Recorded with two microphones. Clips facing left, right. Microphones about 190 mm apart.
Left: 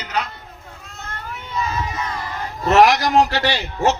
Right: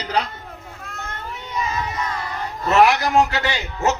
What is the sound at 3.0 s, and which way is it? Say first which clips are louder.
Speech: left 2 dB; 35° left (ahead or behind).